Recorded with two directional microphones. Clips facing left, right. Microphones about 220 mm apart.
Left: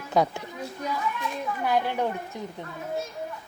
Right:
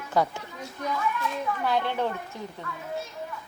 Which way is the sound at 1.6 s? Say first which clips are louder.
Left 2 dB; 10° left (ahead or behind).